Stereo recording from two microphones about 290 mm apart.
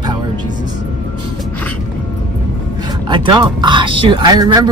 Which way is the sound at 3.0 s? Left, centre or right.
Centre.